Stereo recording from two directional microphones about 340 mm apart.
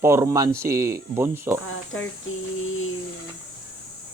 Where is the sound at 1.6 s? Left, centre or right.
Left.